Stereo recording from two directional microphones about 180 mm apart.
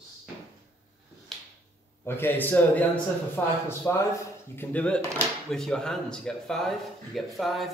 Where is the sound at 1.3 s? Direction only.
Centre (ahead or behind).